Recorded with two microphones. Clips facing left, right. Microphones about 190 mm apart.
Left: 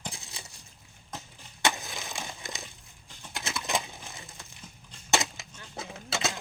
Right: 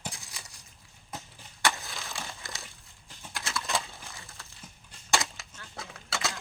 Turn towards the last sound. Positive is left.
turn(degrees=20)  # may be behind; listen again after turning